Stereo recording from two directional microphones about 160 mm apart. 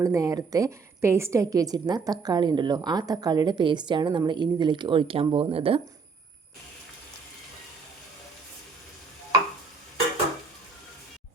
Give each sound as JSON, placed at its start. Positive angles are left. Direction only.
{"t": 0.0, "sound": "a woman's voice", "side_deg": -20}